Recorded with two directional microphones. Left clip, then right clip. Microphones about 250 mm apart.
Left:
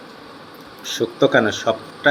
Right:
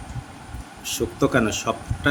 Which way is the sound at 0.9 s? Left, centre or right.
Right.